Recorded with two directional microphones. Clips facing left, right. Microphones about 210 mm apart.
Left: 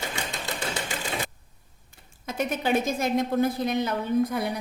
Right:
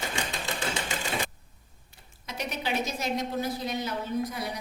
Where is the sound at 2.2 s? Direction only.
50° left (ahead or behind).